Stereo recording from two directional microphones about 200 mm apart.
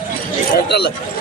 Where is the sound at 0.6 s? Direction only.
55° left (ahead or behind).